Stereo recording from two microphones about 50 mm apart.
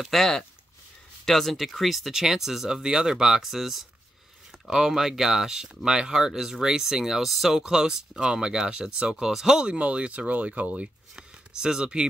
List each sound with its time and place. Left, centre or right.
0.0 s speech: centre; by 10.9 s right
11.1 s speech: centre